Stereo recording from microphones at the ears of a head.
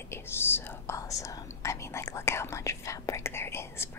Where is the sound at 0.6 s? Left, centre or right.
Left.